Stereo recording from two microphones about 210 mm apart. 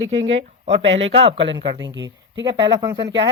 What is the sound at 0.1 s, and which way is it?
A woman's voice, 30° right (ahead or behind).